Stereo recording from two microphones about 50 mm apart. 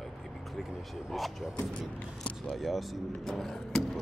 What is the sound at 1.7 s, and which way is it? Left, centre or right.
Speech, left.